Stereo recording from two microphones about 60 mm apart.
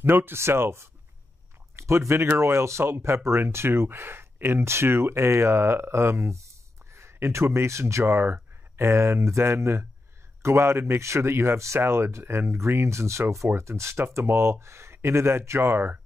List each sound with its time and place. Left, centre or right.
0.0 s speech: right